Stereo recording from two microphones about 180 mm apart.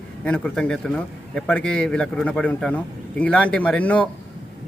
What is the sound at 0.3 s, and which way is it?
A man's voice, 5° left (ahead or behind).